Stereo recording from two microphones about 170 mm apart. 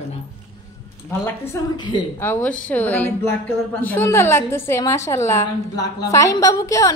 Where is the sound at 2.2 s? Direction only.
10° left (ahead or behind).